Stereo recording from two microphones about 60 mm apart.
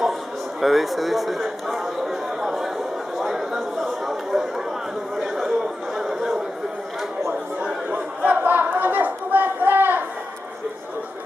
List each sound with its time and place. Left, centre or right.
0.6 s a man's voice: centre
3.2 s chatter: centre
7.6 s chatter: right